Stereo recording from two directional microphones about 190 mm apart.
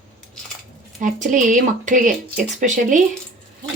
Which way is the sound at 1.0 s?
40° right (ahead or behind).